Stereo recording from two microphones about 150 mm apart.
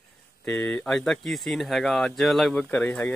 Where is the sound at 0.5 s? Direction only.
10° left (ahead or behind).